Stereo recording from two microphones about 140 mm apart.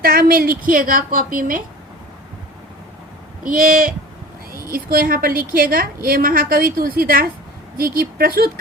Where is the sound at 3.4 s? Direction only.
90° right.